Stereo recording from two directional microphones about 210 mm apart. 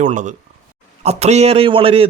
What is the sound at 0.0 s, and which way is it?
A man's voice, 35° right (ahead or behind).